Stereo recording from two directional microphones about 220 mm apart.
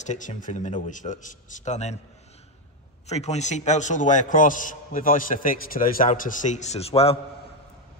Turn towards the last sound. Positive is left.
turn(degrees=25)  # may be behind; listen again after turning